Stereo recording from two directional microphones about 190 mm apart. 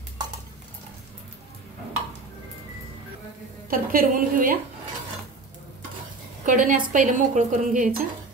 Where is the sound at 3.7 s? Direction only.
50° right (ahead or behind).